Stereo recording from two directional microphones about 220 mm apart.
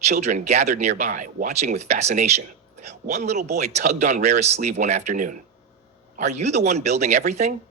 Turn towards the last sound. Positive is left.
turn(degrees=-30)  # may be behind; listen again after turning